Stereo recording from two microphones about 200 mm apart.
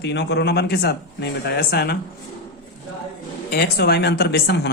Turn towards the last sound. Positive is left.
turn(degrees=55)  # may be behind; listen again after turning